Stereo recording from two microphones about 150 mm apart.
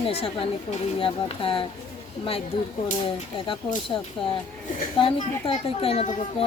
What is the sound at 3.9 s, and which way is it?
Speech, 30° left (ahead or behind).